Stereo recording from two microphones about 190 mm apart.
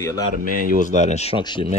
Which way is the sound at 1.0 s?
35° left (ahead or behind).